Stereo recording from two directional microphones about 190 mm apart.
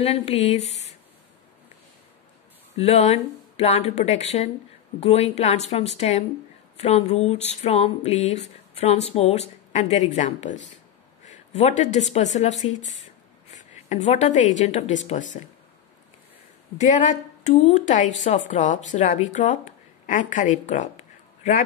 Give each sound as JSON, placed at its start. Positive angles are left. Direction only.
{"t": 0.0, "sound": "speech", "side_deg": 35}
{"t": 2.8, "sound": "a woman's voice", "side_deg": 35}
{"t": 16.7, "sound": "speech", "side_deg": 40}